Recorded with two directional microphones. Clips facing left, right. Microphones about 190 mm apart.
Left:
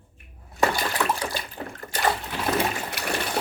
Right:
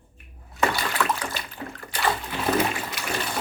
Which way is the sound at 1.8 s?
45° left (ahead or behind).